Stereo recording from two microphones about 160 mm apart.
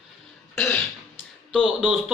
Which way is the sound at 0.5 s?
15° left (ahead or behind).